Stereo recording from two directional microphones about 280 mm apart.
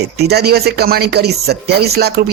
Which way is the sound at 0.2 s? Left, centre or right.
Right.